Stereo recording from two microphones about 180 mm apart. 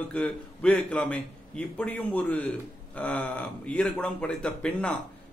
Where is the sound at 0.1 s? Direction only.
5° left (ahead or behind).